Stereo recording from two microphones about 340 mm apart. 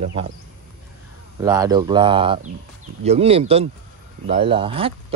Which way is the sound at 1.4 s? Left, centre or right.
Centre.